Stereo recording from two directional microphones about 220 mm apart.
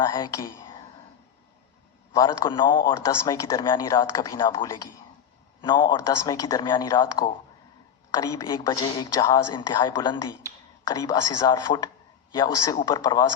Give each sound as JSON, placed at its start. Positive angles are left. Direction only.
{"t": 0.0, "sound": "speech", "side_deg": 15}
{"t": 2.1, "sound": "a man's voice", "side_deg": 20}